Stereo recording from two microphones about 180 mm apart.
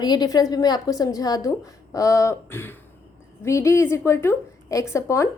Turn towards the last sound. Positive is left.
turn(degrees=15)  # may be behind; listen again after turning